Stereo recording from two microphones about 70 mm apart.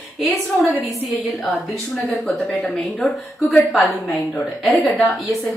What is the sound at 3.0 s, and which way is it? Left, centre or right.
Speech, centre.